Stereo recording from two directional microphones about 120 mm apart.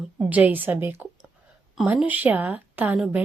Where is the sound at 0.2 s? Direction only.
10° right (ahead or behind).